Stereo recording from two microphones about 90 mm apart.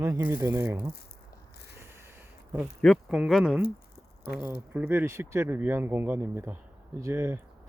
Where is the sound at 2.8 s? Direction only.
Centre (ahead or behind).